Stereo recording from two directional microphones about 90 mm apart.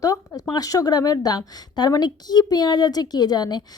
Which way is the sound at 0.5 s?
40° left (ahead or behind).